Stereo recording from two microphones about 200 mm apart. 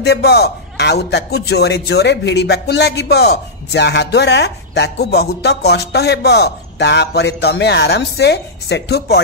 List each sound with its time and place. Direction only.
0.0 s a man's voice: 55° left (ahead or behind)